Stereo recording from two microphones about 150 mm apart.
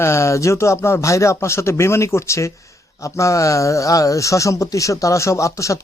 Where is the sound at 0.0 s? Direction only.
20° left (ahead or behind).